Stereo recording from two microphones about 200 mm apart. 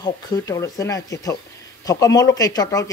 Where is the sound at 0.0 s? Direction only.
15° left (ahead or behind).